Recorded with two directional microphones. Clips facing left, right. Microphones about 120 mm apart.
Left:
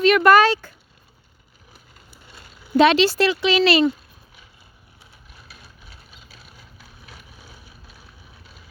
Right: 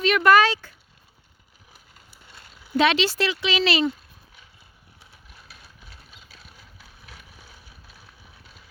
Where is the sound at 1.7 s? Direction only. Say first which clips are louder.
Left 3 dB; centre (ahead or behind).